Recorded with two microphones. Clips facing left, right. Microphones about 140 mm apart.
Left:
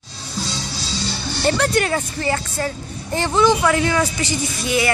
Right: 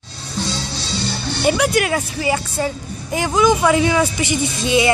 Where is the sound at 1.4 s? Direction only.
10° right (ahead or behind).